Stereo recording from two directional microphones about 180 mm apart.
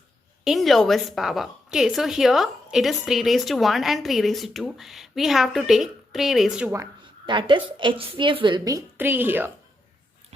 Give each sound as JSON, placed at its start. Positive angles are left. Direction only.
{"t": 0.4, "sound": "speech", "side_deg": 0}
{"t": 7.3, "sound": "a woman's voice", "side_deg": -25}